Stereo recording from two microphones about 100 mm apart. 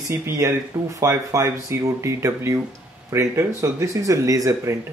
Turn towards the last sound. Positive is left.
turn(degrees=-35)  # may be behind; listen again after turning